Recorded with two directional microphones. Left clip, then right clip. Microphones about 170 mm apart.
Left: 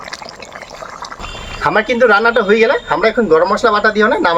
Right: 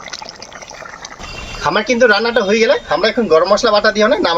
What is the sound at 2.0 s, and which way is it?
Speech, 10° left (ahead or behind).